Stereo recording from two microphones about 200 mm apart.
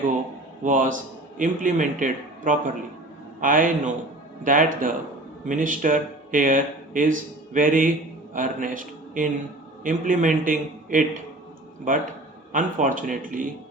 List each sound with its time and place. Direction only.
0.6 s a man's voice: 40° right (ahead or behind)